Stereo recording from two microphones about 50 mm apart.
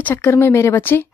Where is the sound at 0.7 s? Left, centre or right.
Left.